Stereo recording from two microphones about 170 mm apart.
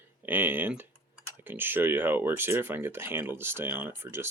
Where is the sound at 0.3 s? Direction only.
10° right (ahead or behind).